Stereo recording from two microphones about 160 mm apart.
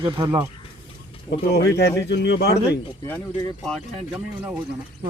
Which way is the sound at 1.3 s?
90° left.